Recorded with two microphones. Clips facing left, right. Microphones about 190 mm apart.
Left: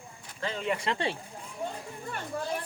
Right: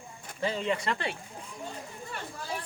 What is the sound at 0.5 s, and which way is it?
Speech, 5° left (ahead or behind).